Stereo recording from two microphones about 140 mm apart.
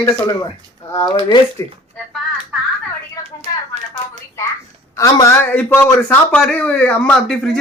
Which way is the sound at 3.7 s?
55° right (ahead or behind).